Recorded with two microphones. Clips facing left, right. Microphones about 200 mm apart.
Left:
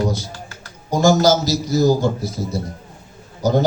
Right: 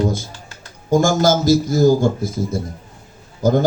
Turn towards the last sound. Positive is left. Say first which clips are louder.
# right 2 dB
turn(degrees=-50)  # may be behind; listen again after turning